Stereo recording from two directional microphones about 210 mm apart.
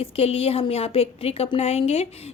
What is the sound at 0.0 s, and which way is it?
A woman's voice, 30° left (ahead or behind).